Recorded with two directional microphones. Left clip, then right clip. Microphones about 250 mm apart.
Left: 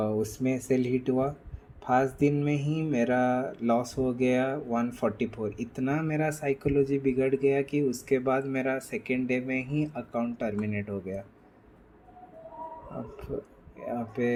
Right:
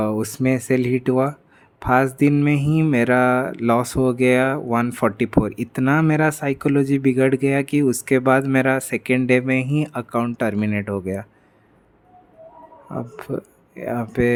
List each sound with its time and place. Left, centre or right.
0.0 s speech: right
13.1 s speech: right